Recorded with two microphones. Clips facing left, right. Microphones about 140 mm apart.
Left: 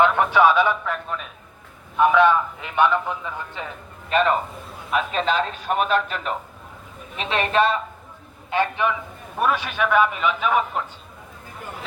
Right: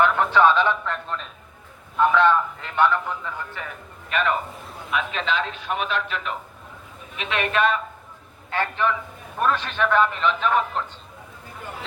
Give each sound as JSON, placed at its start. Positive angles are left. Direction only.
{"t": 0.0, "sound": "a man's voice", "side_deg": 10}
{"t": 4.1, "sound": "a man's voice", "side_deg": 35}
{"t": 8.4, "sound": "a man's voice", "side_deg": 15}